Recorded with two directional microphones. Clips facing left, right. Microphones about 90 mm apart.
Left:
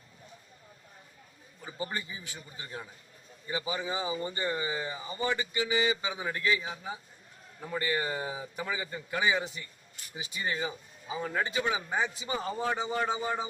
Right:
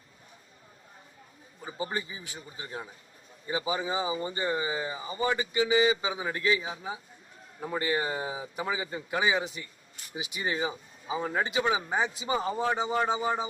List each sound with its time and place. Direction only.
1.6 s speech: 25° right (ahead or behind)